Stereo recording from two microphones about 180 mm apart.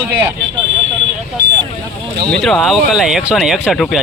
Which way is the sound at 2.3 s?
Centre (ahead or behind).